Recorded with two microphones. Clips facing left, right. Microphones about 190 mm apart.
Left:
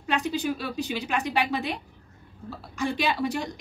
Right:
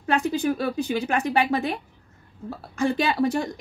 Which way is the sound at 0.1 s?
50° right (ahead or behind).